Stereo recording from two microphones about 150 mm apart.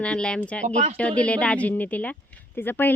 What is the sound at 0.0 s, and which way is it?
Speech, 5° left (ahead or behind).